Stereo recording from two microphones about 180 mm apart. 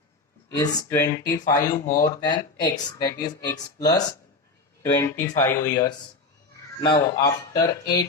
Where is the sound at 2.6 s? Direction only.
20° left (ahead or behind).